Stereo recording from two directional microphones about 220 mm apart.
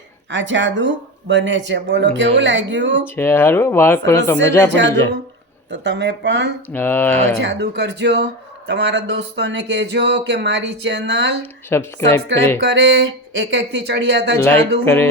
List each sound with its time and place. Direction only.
0.3 s speech: 55° right (ahead or behind)
3.2 s speech: 10° left (ahead or behind)
5.8 s a man's voice: 55° right (ahead or behind)
6.7 s speech: 10° left (ahead or behind)
7.4 s a man's voice: 50° right (ahead or behind)
11.7 s speech: 10° left (ahead or behind)
12.6 s a man's voice: 50° right (ahead or behind)
14.8 s speech: 10° left (ahead or behind)